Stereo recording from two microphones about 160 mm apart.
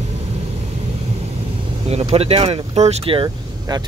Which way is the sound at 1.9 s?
40° right (ahead or behind).